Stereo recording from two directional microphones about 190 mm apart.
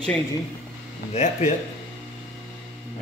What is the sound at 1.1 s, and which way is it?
Speech, 35° left (ahead or behind).